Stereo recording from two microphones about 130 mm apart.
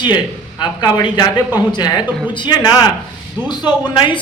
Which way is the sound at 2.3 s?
35° left (ahead or behind).